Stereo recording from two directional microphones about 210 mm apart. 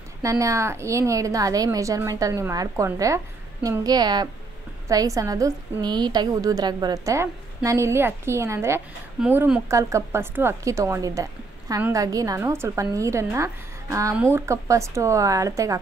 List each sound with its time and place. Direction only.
0.2 s a woman's voice: 15° right (ahead or behind)